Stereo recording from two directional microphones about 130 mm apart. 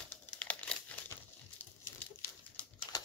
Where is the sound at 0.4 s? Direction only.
10° left (ahead or behind).